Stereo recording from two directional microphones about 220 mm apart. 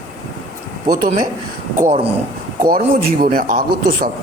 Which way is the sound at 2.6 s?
40° right (ahead or behind).